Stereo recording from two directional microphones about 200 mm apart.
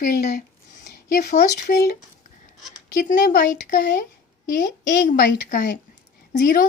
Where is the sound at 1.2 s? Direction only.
45° left (ahead or behind).